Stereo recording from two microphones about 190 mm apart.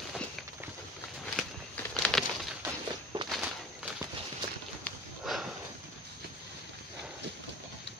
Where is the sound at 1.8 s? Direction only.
Centre (ahead or behind).